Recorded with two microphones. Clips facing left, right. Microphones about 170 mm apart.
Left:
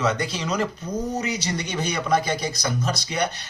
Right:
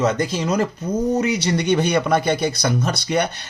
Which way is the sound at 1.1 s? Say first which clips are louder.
Right 7 dB; 60° right (ahead or behind).